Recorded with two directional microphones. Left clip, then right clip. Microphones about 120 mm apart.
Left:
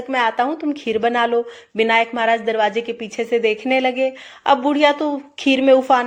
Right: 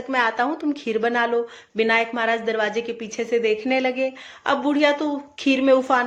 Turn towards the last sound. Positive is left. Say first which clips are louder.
# left 4 dB
turn(degrees=25)  # may be behind; listen again after turning